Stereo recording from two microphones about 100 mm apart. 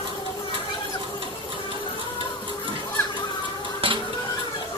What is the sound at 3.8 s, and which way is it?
Music, 60° right (ahead or behind).